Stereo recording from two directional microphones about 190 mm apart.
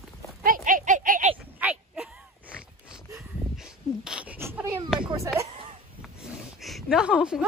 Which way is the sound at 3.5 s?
5° right (ahead or behind).